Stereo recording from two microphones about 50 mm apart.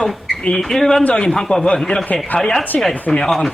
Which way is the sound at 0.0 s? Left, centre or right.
Centre.